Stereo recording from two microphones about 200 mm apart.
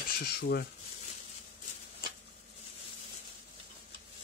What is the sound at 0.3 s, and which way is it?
Speech, 55° left (ahead or behind).